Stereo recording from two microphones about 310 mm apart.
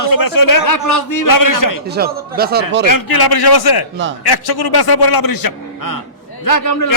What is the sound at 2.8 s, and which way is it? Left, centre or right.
Speech, left.